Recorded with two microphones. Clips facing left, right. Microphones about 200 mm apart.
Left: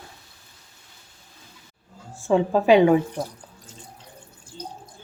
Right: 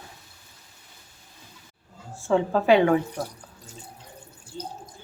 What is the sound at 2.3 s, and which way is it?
Speech, 15° left (ahead or behind).